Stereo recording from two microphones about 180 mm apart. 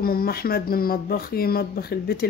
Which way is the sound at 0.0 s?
55° left (ahead or behind).